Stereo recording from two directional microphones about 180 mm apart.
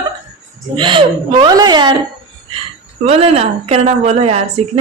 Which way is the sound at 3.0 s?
35° right (ahead or behind).